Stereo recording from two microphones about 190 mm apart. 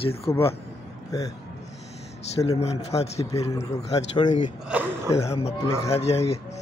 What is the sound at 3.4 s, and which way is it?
Speech, 20° left (ahead or behind).